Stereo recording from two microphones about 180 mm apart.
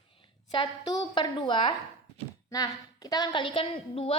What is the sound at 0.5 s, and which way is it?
A woman's voice, 25° left (ahead or behind).